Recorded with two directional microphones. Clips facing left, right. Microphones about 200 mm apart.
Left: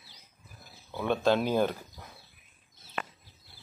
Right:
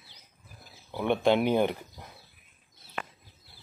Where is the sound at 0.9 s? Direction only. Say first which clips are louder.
Right 2 dB; 15° right (ahead or behind).